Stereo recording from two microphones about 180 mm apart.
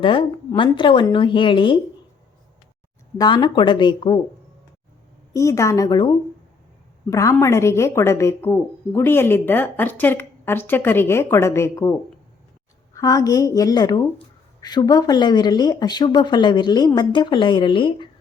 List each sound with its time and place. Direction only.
0.0 s a woman's voice: 30° left (ahead or behind)
3.2 s a woman's voice: 25° left (ahead or behind)
5.3 s a woman's voice: 15° left (ahead or behind)